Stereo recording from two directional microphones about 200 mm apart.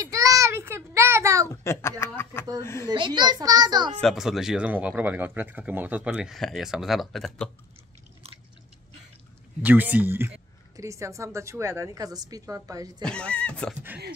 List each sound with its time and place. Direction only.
0.0 s child singing: 15° right (ahead or behind)
1.5 s speech: 15° left (ahead or behind)
2.9 s a child's voice: 20° right (ahead or behind)
4.0 s speech: centre (ahead or behind)
9.6 s a woman's voice: 10° right (ahead or behind)
13.0 s speech: 5° left (ahead or behind)